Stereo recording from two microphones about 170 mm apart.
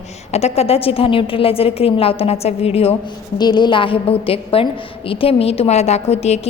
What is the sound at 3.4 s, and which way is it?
A woman's voice, 25° left (ahead or behind).